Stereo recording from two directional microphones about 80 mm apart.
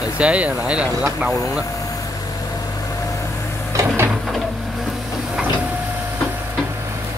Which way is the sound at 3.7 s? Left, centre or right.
Right.